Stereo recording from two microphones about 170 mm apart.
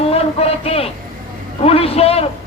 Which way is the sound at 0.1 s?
35° left (ahead or behind).